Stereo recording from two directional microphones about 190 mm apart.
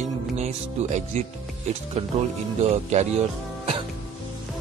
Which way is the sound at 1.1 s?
35° right (ahead or behind).